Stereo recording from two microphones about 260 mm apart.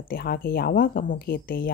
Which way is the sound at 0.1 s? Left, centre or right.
Left.